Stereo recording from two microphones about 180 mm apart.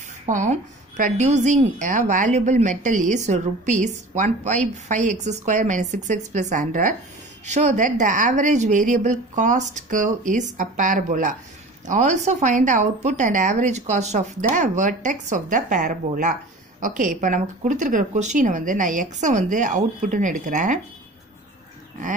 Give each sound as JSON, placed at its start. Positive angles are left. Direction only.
{"t": 0.3, "sound": "speech", "side_deg": -45}